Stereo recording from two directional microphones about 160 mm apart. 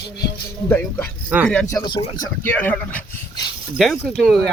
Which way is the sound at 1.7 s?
25° left (ahead or behind).